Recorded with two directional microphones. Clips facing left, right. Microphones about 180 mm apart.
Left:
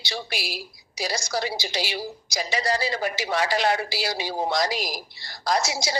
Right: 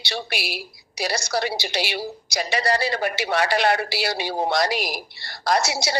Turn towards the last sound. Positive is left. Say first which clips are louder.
# right 3 dB
turn(degrees=-65)  # may be behind; listen again after turning